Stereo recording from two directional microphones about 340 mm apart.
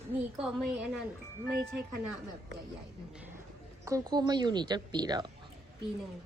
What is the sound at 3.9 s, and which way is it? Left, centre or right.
Speech, centre.